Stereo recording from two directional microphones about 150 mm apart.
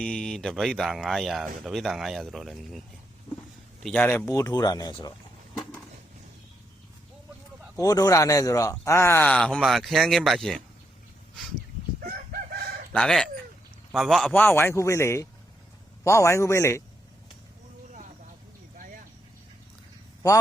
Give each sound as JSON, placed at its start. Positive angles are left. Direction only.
{"t": 0.0, "sound": "speech", "side_deg": 5}
{"t": 3.8, "sound": "speech", "side_deg": 10}
{"t": 7.8, "sound": "speech", "side_deg": 25}
{"t": 11.9, "sound": "chicken", "side_deg": -70}
{"t": 12.9, "sound": "speech", "side_deg": 5}
{"t": 14.3, "sound": "speech", "side_deg": 15}